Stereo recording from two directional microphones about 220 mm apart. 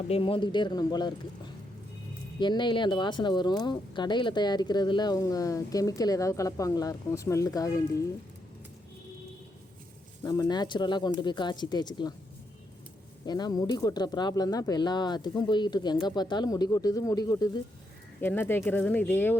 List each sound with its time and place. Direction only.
0.1 s speech: 25° left (ahead or behind)
2.4 s speech: 20° left (ahead or behind)
10.2 s speech: 20° left (ahead or behind)
13.2 s speech: 20° left (ahead or behind)